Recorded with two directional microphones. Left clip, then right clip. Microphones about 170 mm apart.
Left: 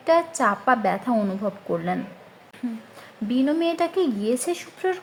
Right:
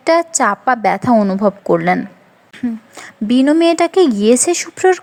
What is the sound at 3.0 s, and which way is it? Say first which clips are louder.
Speech: right 10 dB; 45° right (ahead or behind).